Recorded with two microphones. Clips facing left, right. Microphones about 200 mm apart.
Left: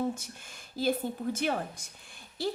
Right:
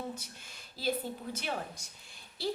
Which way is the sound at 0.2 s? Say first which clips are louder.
Left 3 dB; 50° left (ahead or behind).